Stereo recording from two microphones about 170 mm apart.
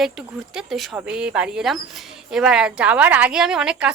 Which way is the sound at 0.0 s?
5° right (ahead or behind).